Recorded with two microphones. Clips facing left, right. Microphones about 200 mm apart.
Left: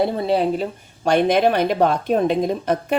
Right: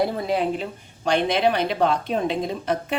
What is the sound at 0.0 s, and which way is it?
Speech, 30° left (ahead or behind).